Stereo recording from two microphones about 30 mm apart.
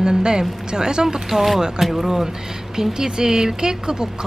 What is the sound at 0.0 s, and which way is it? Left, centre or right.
Speech, right.